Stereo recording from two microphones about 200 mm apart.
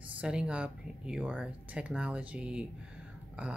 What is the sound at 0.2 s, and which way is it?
Speech, 5° right (ahead or behind).